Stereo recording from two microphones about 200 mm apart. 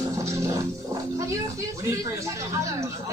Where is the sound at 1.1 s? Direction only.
15° right (ahead or behind).